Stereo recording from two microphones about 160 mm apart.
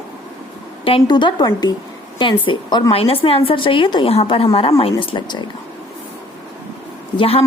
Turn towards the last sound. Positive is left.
turn(degrees=40)  # may be behind; listen again after turning